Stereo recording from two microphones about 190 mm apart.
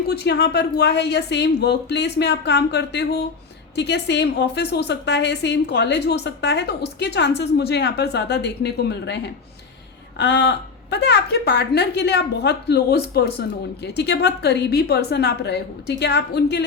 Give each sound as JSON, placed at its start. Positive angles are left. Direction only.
{"t": 0.1, "sound": "a woman's voice", "side_deg": 60}